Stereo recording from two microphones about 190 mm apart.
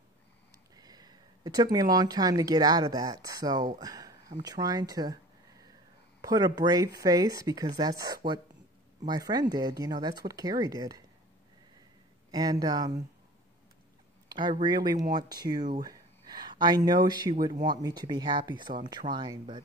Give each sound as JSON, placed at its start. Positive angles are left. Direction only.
{"t": 0.7, "sound": "speech", "side_deg": -20}
{"t": 3.8, "sound": "a sound", "side_deg": -20}
{"t": 6.2, "sound": "speech", "side_deg": -20}
{"t": 12.3, "sound": "speech", "side_deg": -20}
{"t": 14.6, "sound": "speech", "side_deg": -20}